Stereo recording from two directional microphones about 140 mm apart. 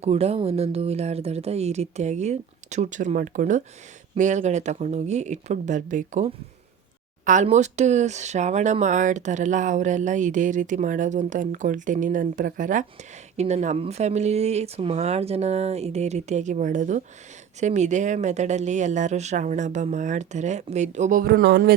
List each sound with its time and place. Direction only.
0.0 s speech: 50° right (ahead or behind); by 6.3 s 65° right (ahead or behind)
7.4 s speech: 55° right (ahead or behind)
13.3 s speech: 55° right (ahead or behind); by 21.8 s 90° right